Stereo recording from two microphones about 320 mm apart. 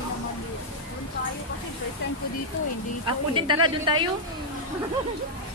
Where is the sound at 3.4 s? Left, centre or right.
Right.